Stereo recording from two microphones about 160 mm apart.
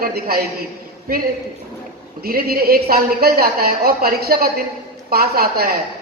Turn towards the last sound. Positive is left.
turn(degrees=-70)  # may be behind; listen again after turning